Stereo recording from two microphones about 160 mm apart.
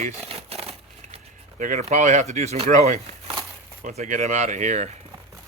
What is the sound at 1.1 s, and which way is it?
Speech, 50° right (ahead or behind).